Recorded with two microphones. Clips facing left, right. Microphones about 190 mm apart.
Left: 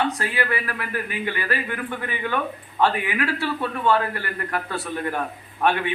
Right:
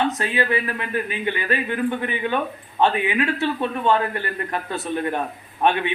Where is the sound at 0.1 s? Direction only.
20° right (ahead or behind).